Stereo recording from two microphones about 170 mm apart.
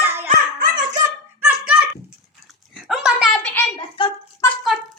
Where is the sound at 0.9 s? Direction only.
45° right (ahead or behind).